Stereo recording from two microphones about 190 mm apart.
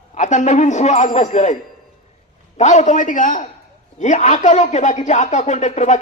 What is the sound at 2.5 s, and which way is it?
Speech, 40° left (ahead or behind).